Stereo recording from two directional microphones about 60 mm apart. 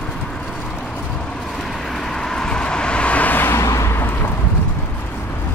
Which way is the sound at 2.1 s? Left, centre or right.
Centre.